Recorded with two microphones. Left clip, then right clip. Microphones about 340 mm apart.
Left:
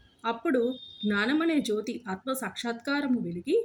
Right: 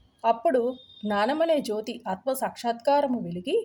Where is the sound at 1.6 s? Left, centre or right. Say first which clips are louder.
Right 1 dB; right.